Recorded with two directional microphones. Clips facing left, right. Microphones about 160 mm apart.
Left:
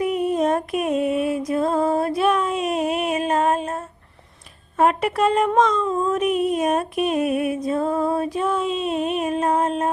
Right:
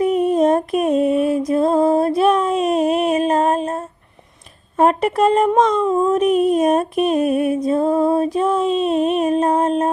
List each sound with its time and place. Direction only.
0.0 s music: 35° right (ahead or behind)
4.8 s speech: 35° right (ahead or behind)
5.5 s music: 30° right (ahead or behind)